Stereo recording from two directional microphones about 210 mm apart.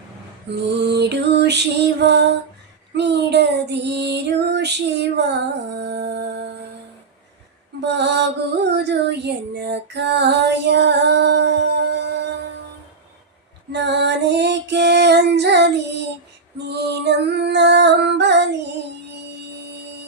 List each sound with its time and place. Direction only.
0.7 s music: 55° right (ahead or behind)
2.0 s female singing: 55° right (ahead or behind)
2.9 s child singing: 55° right (ahead or behind)
7.8 s mantra: 55° right (ahead or behind)
8.7 s female singing: 55° right (ahead or behind)
13.7 s music: 55° right (ahead or behind)